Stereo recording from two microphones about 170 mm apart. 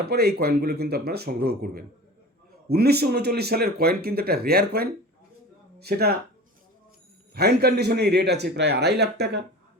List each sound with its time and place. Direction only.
0.0 s speech: 70° right (ahead or behind)
7.3 s speech: 70° right (ahead or behind)